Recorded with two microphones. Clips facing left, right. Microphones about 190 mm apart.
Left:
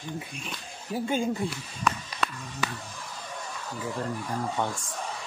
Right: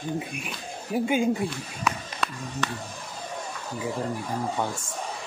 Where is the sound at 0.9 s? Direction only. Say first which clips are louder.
Right 4 dB; 10° right (ahead or behind).